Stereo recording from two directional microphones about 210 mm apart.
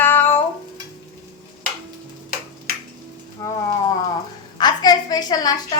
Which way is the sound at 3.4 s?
15° left (ahead or behind).